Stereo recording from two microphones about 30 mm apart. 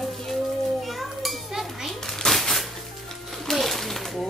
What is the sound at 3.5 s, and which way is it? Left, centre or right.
Splash, centre.